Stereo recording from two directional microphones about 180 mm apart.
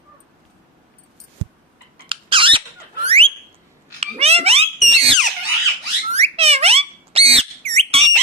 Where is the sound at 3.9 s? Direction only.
35° right (ahead or behind).